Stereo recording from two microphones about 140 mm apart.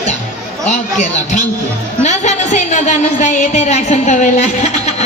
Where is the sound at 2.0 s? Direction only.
60° left (ahead or behind).